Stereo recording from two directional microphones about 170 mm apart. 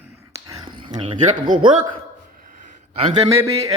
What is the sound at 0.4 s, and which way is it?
Whispering, 25° right (ahead or behind).